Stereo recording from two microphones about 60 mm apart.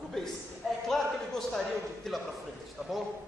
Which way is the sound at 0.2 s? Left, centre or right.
Centre.